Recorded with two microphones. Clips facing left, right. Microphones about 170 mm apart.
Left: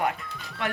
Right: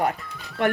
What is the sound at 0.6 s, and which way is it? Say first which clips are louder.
Speech: right 8 dB; 50° right (ahead or behind).